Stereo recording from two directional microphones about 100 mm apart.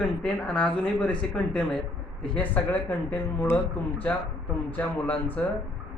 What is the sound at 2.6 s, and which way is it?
Speech, 25° left (ahead or behind).